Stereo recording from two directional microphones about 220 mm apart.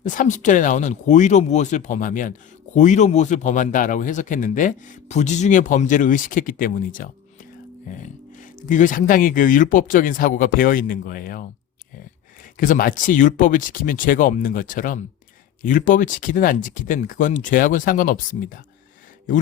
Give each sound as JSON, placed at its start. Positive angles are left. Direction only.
{"t": 0.0, "sound": "speech", "side_deg": 35}
{"t": 12.5, "sound": "speech", "side_deg": 35}